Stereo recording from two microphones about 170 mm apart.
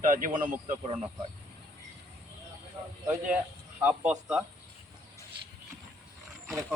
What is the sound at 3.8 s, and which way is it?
Speech, 10° right (ahead or behind).